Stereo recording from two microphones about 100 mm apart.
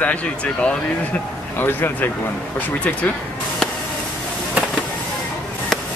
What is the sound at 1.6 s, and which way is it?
Speech, 20° left (ahead or behind).